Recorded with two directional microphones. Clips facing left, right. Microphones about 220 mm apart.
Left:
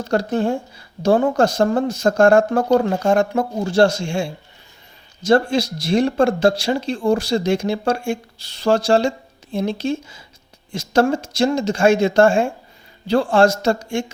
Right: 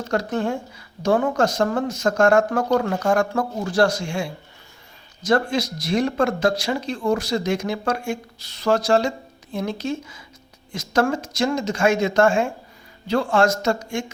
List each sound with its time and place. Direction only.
0.1 s speech: 30° left (ahead or behind)